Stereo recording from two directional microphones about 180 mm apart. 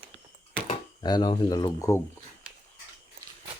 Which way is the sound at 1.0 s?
25° left (ahead or behind).